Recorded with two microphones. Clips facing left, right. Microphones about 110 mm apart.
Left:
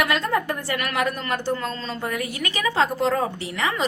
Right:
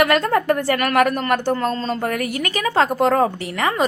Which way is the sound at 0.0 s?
55° right (ahead or behind).